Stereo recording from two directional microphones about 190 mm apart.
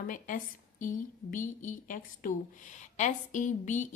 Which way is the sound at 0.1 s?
45° left (ahead or behind).